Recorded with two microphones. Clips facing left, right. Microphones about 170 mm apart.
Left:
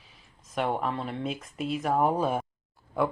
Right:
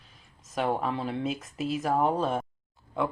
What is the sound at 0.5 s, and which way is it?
Speech, centre (ahead or behind).